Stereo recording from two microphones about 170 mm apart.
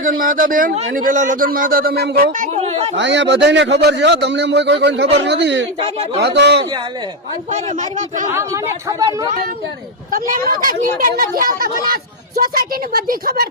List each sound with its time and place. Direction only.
0.0 s a man's voice: 55° right (ahead or behind)
2.6 s a sound: 35° right (ahead or behind)
2.9 s a man's voice: 90° right
5.8 s speech: 40° right (ahead or behind)
6.2 s a man's voice: 80° right
7.5 s a man's voice: 45° right (ahead or behind)
8.3 s a woman's voice: 15° right (ahead or behind)
10.1 s a man's voice: 55° right (ahead or behind)